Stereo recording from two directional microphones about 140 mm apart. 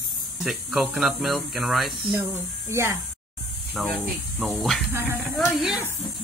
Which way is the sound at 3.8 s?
5° left (ahead or behind).